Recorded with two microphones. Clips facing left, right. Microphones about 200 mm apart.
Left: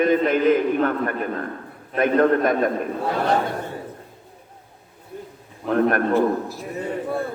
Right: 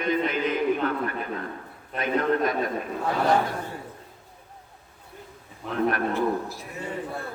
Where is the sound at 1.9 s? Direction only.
55° left (ahead or behind).